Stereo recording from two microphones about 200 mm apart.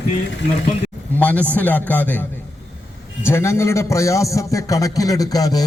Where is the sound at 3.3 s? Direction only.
15° left (ahead or behind).